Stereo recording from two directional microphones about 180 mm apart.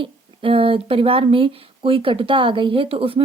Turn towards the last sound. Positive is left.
turn(degrees=-30)  # may be behind; listen again after turning